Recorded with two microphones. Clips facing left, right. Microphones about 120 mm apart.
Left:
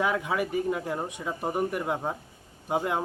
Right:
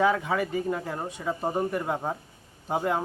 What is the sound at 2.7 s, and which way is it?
Speech, 15° left (ahead or behind).